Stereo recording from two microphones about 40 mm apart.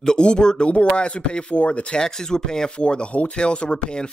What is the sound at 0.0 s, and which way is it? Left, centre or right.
Speech, centre.